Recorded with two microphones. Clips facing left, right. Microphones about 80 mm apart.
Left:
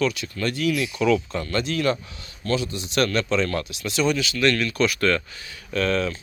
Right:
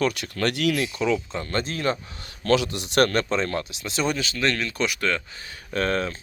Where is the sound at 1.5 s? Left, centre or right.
Right.